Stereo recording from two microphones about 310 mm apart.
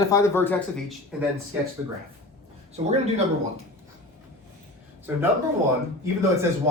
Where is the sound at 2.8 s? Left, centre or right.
Centre.